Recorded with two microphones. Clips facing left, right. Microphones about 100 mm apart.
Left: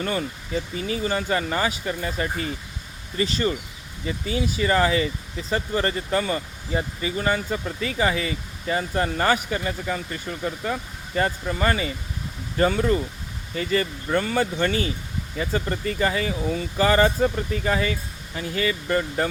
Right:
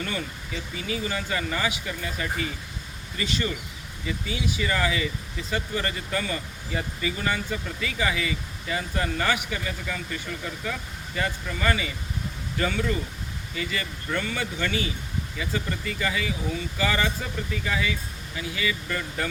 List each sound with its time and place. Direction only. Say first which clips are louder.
0.0 s speech: left 5 dB; 35° left (ahead or behind)